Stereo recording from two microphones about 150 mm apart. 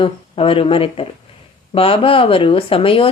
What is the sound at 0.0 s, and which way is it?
A woman's voice, 35° left (ahead or behind).